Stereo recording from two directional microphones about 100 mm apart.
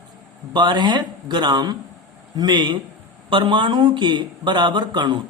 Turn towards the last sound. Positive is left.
turn(degrees=-50)  # may be behind; listen again after turning